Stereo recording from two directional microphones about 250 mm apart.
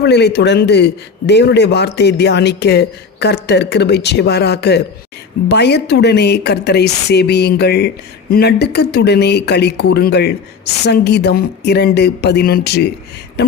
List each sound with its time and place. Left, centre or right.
0.0 s a man's voice: left